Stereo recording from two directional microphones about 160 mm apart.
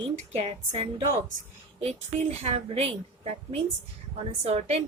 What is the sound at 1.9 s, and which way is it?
A woman's voice, 40° right (ahead or behind).